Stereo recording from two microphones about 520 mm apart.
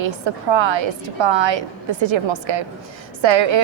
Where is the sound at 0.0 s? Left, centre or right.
Right.